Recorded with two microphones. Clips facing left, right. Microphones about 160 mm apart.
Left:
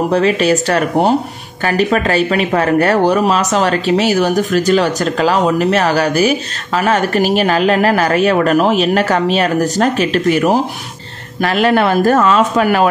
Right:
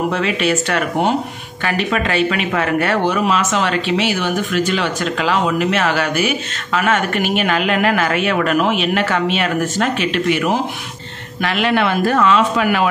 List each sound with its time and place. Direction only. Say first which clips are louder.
0.1 s speech: left 6 dB; 40° left (ahead or behind)